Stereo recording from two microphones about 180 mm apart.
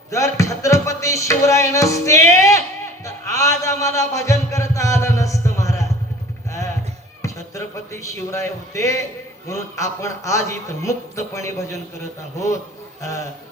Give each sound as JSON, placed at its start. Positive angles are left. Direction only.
{"t": 0.1, "sound": "music", "side_deg": 15}
{"t": 7.2, "sound": "a sound", "side_deg": 15}
{"t": 8.3, "sound": "a man's voice", "side_deg": 15}
{"t": 13.0, "sound": "a man's voice", "side_deg": 15}